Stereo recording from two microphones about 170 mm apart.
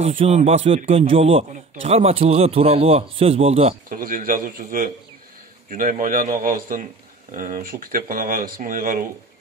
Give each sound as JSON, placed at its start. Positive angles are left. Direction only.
{"t": 0.0, "sound": "a man's voice", "side_deg": -35}
{"t": 3.9, "sound": "a man's voice", "side_deg": -55}